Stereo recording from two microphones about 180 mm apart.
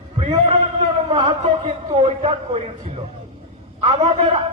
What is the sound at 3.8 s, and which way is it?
Speech, 35° right (ahead or behind).